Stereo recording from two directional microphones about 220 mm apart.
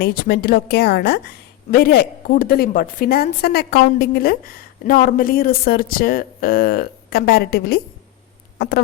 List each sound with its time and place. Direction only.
0.0 s a woman's voice: 45° left (ahead or behind)